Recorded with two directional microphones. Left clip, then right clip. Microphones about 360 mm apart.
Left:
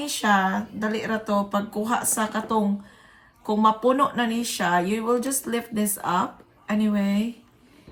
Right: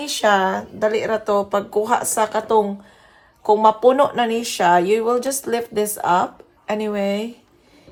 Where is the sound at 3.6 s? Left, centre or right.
Right.